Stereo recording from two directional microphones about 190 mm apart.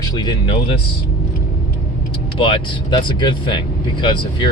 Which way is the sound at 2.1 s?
25° left (ahead or behind).